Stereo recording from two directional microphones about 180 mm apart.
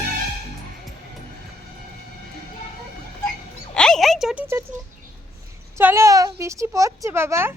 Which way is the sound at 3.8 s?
5° left (ahead or behind).